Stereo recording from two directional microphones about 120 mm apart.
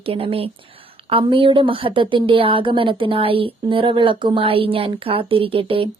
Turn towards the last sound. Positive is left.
turn(degrees=-50)  # may be behind; listen again after turning